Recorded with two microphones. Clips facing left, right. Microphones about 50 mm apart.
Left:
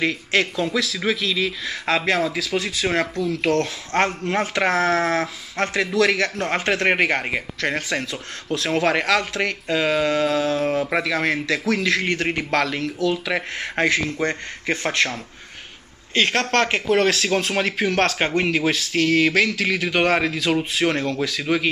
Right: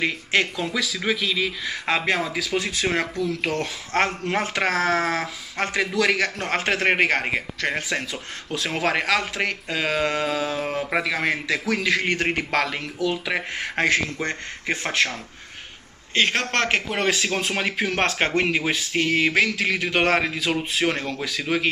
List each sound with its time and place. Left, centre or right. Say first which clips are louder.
0.0 s speech: left 1 dB; centre
2.8 s speech: left 3 dB; centre
4.6 s speech: left 3 dB; centre
5.6 s speech: left 3 dB; centre
13.9 s speech: left 2 dB; centre
14.7 s speech: left 2 dB; centre
16.2 s speech: left 2 dB; centre
18.0 s a man's voice: left 1 dB; right
18.3 s speech: left 2 dB; centre